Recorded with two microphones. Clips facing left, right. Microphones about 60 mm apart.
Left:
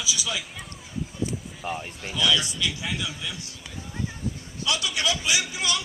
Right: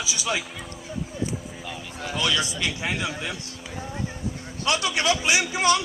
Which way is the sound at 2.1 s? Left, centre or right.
Right.